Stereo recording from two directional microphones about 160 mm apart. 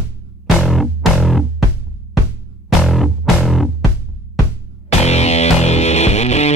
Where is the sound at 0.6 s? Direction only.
Centre (ahead or behind).